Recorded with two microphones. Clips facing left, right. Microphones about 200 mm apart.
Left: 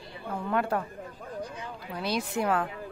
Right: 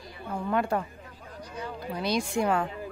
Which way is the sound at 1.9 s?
5° left (ahead or behind).